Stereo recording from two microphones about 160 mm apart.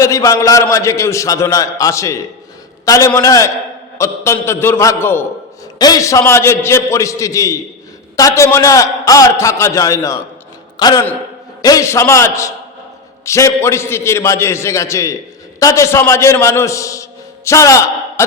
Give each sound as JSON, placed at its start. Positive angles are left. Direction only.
{"t": 0.0, "sound": "a man's voice", "side_deg": 20}